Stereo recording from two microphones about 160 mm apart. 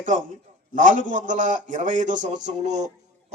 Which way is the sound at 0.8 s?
55° right (ahead or behind).